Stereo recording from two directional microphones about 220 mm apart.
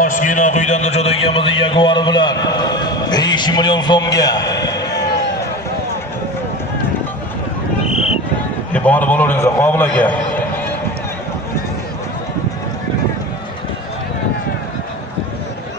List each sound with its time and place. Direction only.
0.0 s a man's voice: 35° left (ahead or behind); by 4.8 s 15° left (ahead or behind)
8.7 s a man's voice: 5° left (ahead or behind)